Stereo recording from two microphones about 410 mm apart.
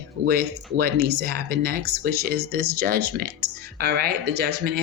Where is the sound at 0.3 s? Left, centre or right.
Right.